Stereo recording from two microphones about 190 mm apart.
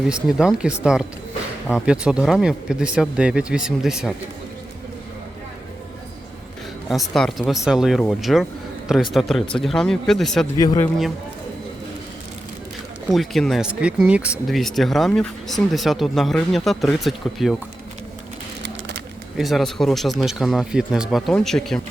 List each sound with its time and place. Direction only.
0.1 s speech: 5° right (ahead or behind)
6.8 s speech: centre (ahead or behind)
10.6 s a man's voice: 20° left (ahead or behind)
13.1 s speech: centre (ahead or behind)
18.6 s bird: 65° right (ahead or behind)
19.4 s speech: centre (ahead or behind)